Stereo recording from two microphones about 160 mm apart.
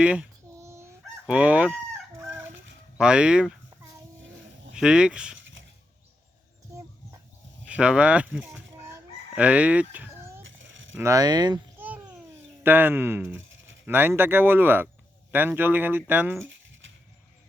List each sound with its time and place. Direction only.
0.0 s speech: 5° right (ahead or behind)
0.6 s crowing: 15° right (ahead or behind)
3.0 s speech: 5° right (ahead or behind)
4.7 s speech: 5° right (ahead or behind)
7.7 s speech: 5° right (ahead or behind)
9.3 s chicken: 10° right (ahead or behind)
10.9 s speech: 20° right (ahead or behind)
12.6 s speech: 10° right (ahead or behind)